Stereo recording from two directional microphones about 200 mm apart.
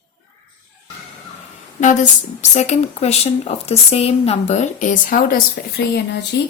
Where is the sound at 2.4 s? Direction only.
35° left (ahead or behind).